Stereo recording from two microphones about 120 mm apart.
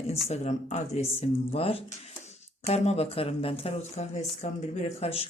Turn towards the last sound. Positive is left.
turn(degrees=55)  # may be behind; listen again after turning